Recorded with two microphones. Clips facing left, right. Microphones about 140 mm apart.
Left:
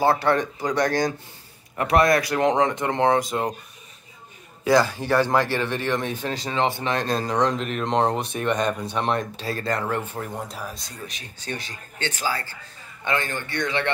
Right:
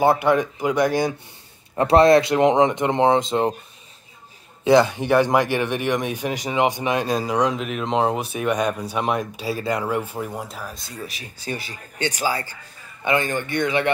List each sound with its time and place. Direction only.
0.0 s speech: 15° right (ahead or behind)
1.8 s speech: 25° right (ahead or behind)
4.6 s speech: 20° right (ahead or behind)